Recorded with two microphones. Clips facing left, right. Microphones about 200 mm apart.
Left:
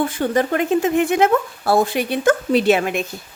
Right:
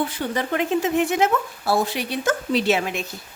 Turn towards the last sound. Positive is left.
turn(degrees=55)  # may be behind; listen again after turning